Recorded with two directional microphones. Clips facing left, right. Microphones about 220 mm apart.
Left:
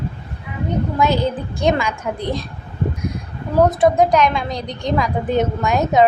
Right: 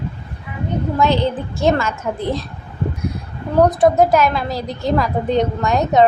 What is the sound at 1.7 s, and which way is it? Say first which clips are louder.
Speech: right 1 dB; 10° left (ahead or behind).